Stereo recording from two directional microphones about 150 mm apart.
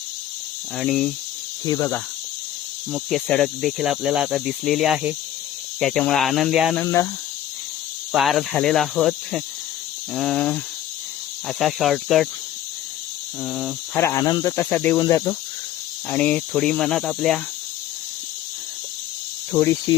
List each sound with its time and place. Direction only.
0.8 s speech: 5° left (ahead or behind)
1.6 s speech: 25° left (ahead or behind)
2.9 s speech: centre (ahead or behind)
6.8 s speech: 20° left (ahead or behind)
8.1 s speech: centre (ahead or behind)
13.4 s speech: centre (ahead or behind)
13.9 s speech: 20° left (ahead or behind)
15.0 s speech: 30° left (ahead or behind)
16.0 s speech: 10° left (ahead or behind)